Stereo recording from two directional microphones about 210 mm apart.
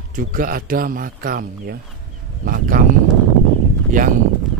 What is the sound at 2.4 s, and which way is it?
Speech, 45° right (ahead or behind).